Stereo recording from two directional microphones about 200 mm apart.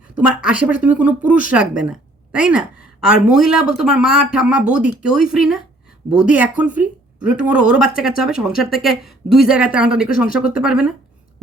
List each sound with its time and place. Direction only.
0.2 s speech: 5° right (ahead or behind)
10.1 s speech: 45° left (ahead or behind)
10.5 s speech: 5° right (ahead or behind)